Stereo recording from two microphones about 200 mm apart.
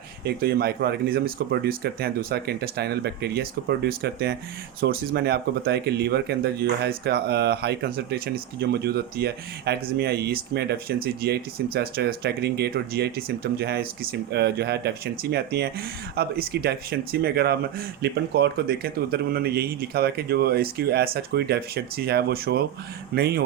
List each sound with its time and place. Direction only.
0.3 s speech: 50° right (ahead or behind)